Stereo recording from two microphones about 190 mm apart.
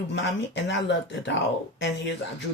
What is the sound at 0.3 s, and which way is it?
Speech, 70° left (ahead or behind).